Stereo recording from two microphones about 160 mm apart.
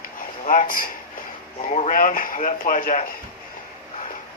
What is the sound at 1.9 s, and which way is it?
Speech, 60° left (ahead or behind).